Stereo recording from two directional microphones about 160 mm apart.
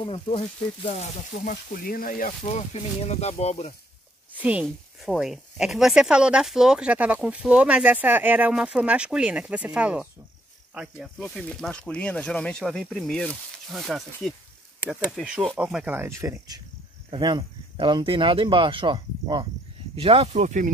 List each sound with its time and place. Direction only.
0.0 s speech: 35° left (ahead or behind)
1.4 s speech: 65° left (ahead or behind)
2.4 s speech: 40° left (ahead or behind)
4.3 s speech: 10° right (ahead or behind)
15.0 s speech: 5° right (ahead or behind); by 20.7 s 50° right (ahead or behind)